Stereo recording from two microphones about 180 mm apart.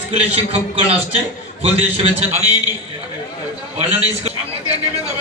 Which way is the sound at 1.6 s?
35° right (ahead or behind).